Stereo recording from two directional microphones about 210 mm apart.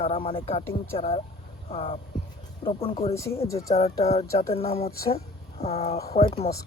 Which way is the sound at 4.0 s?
30° left (ahead or behind).